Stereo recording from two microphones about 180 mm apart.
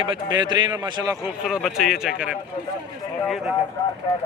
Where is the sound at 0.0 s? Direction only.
25° right (ahead or behind).